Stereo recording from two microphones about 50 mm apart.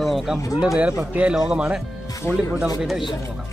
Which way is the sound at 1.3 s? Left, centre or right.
Centre.